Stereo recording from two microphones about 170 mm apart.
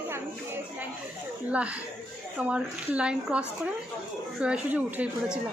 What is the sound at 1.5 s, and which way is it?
A woman's voice, 5° right (ahead or behind).